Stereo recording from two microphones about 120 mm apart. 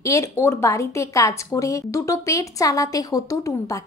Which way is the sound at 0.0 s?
25° left (ahead or behind).